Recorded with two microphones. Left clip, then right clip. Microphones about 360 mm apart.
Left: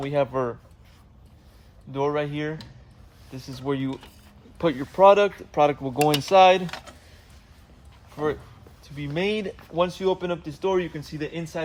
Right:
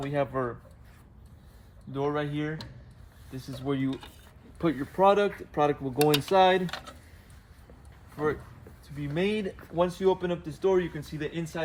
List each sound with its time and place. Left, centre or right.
0.0 s speech: left
1.9 s speech: centre
8.1 s speech: left